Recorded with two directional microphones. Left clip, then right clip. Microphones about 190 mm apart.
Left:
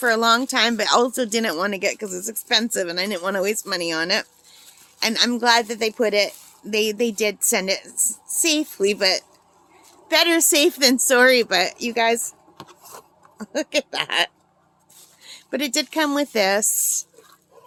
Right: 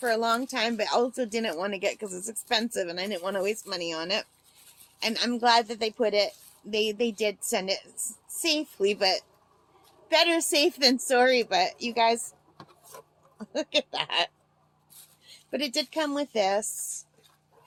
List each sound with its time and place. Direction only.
0.0 s speech: 45° left (ahead or behind)
13.4 s speech: 30° left (ahead or behind)
15.3 s speech: 35° left (ahead or behind)